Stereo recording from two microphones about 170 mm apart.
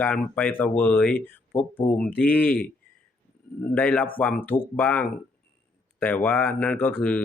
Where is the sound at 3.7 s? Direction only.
5° left (ahead or behind).